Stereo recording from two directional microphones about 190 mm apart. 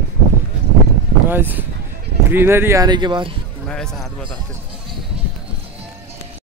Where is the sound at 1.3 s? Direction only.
10° right (ahead or behind).